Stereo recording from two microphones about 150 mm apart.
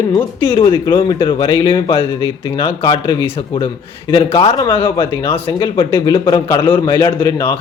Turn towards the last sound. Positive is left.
turn(degrees=30)  # may be behind; listen again after turning